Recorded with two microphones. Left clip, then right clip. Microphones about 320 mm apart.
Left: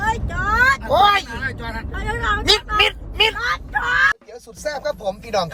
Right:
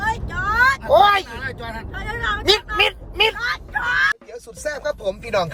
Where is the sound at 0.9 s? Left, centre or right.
Centre.